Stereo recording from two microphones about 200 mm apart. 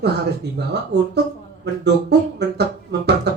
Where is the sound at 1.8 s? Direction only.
55° right (ahead or behind).